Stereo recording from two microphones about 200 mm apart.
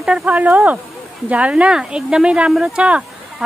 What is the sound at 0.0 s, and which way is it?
Speech, 5° right (ahead or behind).